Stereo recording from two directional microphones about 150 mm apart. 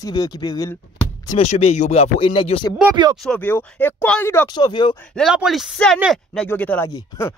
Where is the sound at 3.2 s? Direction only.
10° left (ahead or behind).